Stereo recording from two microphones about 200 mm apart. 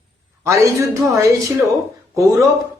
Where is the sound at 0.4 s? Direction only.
15° right (ahead or behind).